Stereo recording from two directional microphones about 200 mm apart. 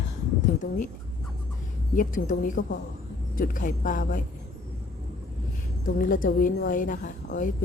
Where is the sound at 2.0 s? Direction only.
40° left (ahead or behind).